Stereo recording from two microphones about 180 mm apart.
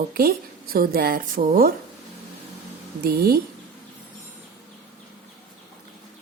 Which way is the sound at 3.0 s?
55° right (ahead or behind).